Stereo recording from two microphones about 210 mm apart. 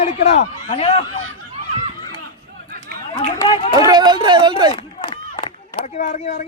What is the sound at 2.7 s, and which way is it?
Chatter, 45° right (ahead or behind).